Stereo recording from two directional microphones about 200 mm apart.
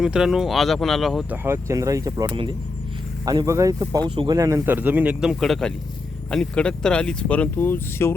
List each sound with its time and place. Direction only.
0.0 s speech: 5° right (ahead or behind)
1.5 s speech: 15° right (ahead or behind); by 8.1 s 10° left (ahead or behind)